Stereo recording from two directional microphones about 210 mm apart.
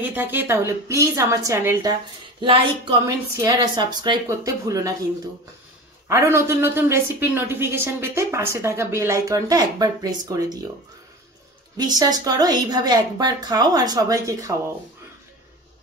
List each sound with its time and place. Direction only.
0.0 s a woman's voice: 10° right (ahead or behind)
6.0 s a woman's voice: 15° right (ahead or behind)
11.7 s a woman's voice: 20° right (ahead or behind)